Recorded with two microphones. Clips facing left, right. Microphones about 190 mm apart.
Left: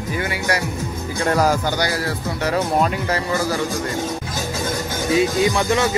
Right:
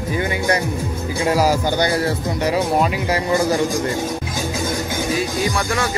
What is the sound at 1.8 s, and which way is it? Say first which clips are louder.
Speech: right 4 dB; 25° right (ahead or behind).